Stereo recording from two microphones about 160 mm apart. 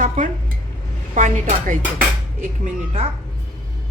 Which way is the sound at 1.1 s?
50° right (ahead or behind).